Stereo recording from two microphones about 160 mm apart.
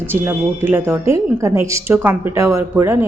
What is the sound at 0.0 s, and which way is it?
A woman's voice, 15° right (ahead or behind).